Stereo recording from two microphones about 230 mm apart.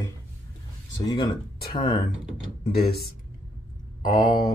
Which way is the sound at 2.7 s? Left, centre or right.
Left.